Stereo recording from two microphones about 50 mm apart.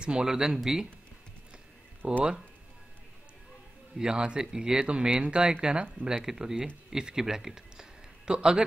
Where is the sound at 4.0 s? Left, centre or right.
Centre.